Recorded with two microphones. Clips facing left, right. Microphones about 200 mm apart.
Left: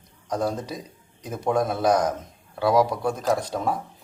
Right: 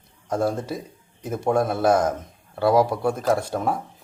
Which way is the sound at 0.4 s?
5° right (ahead or behind).